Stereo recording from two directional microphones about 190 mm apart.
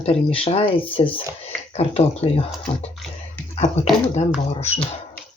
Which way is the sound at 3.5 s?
35° left (ahead or behind).